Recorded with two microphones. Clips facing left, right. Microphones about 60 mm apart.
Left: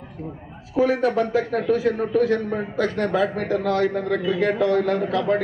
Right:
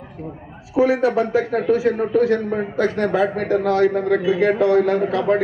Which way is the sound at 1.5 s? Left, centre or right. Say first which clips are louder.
Right 3 dB; right.